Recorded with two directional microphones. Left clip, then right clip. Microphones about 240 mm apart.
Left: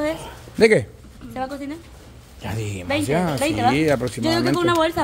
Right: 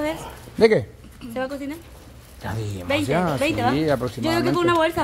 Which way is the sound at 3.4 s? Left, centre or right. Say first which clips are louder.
Left 2 dB; centre.